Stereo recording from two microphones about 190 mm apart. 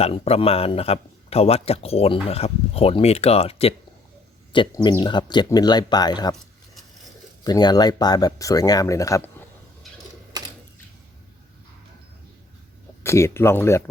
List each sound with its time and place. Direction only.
0.0 s speech: 30° left (ahead or behind)
7.4 s speech: 20° left (ahead or behind)
13.0 s speech: 15° left (ahead or behind)